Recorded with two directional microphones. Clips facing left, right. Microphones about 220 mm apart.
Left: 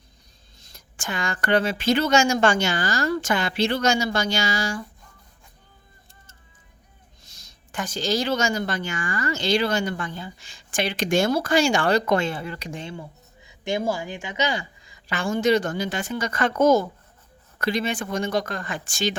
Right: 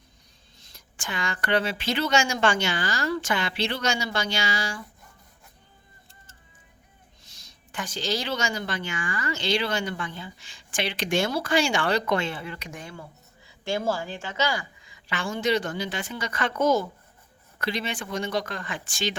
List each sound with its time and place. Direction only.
0.6 s a woman's voice: 45° left (ahead or behind)
7.3 s a woman's voice: 45° left (ahead or behind); by 14.7 s 20° left (ahead or behind)
14.8 s a woman's voice: 40° left (ahead or behind)